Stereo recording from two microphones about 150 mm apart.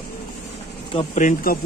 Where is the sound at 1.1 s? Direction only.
55° left (ahead or behind).